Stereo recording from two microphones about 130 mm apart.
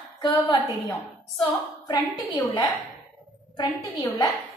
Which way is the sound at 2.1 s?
30° left (ahead or behind).